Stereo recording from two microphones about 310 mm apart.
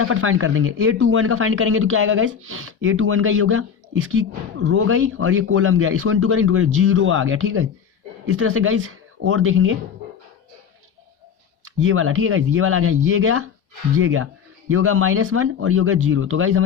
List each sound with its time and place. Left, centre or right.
0.0 s speech: right
11.8 s speech: right